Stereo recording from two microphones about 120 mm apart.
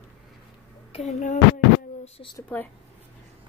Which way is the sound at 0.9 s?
80° left.